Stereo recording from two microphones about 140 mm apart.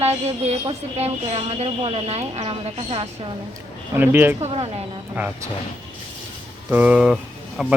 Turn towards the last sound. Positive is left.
turn(degrees=-5)  # may be behind; listen again after turning